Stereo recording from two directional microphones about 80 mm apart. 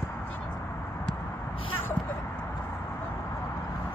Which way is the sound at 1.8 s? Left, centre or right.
Left.